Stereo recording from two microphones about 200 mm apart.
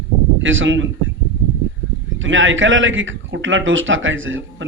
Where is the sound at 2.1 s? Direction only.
70° right (ahead or behind).